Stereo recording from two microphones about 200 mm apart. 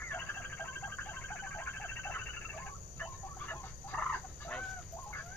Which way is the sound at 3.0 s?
10° left (ahead or behind).